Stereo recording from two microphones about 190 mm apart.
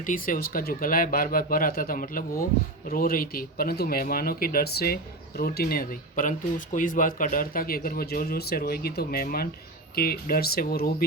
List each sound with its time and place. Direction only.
0.0 s speech: 45° left (ahead or behind)